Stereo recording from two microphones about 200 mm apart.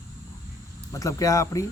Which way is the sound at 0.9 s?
15° left (ahead or behind).